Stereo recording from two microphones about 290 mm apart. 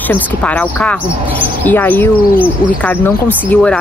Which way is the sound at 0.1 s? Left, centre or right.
Centre.